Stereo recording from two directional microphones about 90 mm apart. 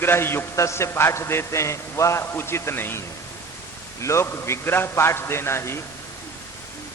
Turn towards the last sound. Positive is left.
turn(degrees=30)  # may be behind; listen again after turning